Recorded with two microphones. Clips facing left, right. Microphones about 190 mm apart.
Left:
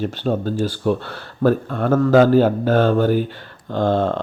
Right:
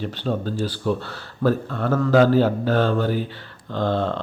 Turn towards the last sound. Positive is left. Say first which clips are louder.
# left 4 dB
turn(degrees=50)  # may be behind; listen again after turning